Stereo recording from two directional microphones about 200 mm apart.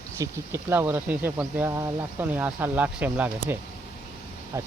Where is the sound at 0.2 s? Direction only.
15° right (ahead or behind).